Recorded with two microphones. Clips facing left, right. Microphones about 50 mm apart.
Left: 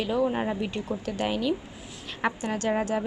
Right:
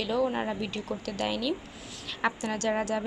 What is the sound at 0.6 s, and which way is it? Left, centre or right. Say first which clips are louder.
Speech: left 3 dB; centre.